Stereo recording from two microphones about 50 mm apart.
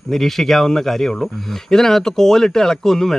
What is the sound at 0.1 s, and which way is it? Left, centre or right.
Speech, centre.